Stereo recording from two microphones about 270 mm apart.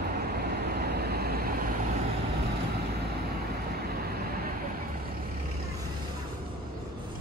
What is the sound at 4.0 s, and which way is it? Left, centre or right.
Vehicle, right.